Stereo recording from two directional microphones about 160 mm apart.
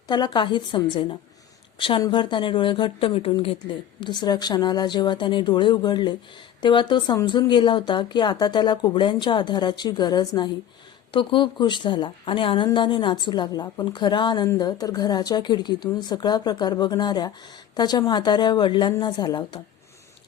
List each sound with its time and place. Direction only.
0.1 s a woman's voice: 30° left (ahead or behind)